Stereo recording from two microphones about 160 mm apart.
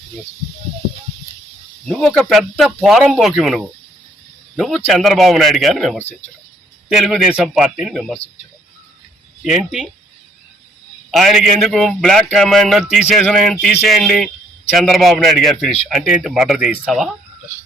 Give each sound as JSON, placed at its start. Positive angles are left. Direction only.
{"t": 1.8, "sound": "a man's voice", "side_deg": 5}
{"t": 9.4, "sound": "a man's voice", "side_deg": 0}
{"t": 11.1, "sound": "a man's voice", "side_deg": 0}